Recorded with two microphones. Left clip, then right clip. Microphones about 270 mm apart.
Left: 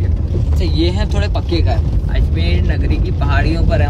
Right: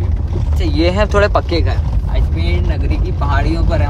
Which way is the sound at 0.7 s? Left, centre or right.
Centre.